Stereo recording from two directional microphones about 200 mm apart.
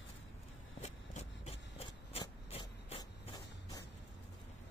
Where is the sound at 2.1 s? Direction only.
30° left (ahead or behind).